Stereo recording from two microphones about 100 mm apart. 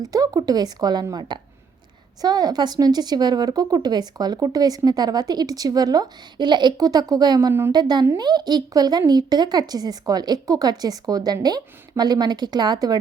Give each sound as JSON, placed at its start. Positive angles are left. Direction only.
{"t": 0.0, "sound": "a woman's voice", "side_deg": -40}